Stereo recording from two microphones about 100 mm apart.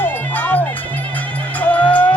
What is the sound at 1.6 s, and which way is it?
Music, 15° left (ahead or behind).